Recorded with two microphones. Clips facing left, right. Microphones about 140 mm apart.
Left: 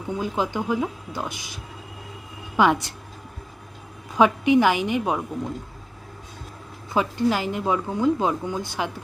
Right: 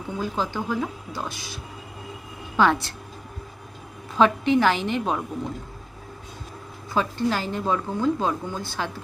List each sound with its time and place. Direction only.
0.2 s speech: 15° left (ahead or behind)
2.6 s speech: 15° left (ahead or behind)
4.2 s speech: 15° left (ahead or behind)
6.9 s speech: 15° left (ahead or behind)